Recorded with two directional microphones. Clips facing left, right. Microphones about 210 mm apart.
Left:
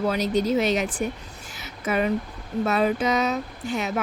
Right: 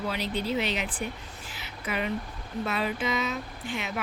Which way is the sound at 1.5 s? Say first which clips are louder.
Left 8 dB; 45° left (ahead or behind).